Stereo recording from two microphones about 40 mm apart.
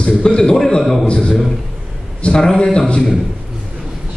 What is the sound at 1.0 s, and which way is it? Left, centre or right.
A man's voice, left.